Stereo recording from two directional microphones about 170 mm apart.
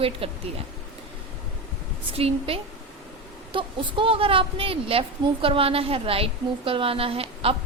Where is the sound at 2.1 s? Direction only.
35° right (ahead or behind).